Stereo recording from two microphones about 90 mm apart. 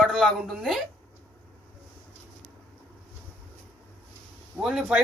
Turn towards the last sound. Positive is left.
turn(degrees=-10)  # may be behind; listen again after turning